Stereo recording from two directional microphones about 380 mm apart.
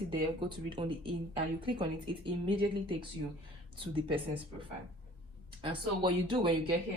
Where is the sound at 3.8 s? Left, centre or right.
Centre.